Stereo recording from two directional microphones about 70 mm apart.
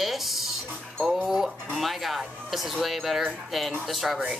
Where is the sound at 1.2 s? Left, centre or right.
Centre.